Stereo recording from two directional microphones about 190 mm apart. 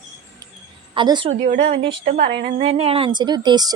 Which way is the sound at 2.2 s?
65° right (ahead or behind).